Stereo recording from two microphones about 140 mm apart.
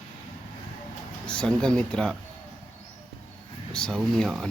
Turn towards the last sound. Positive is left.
turn(degrees=0)  # may be behind; listen again after turning